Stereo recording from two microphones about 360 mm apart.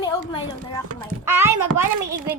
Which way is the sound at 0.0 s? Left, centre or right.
Centre.